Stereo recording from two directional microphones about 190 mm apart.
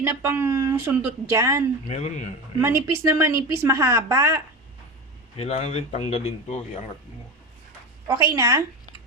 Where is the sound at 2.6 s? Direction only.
15° right (ahead or behind).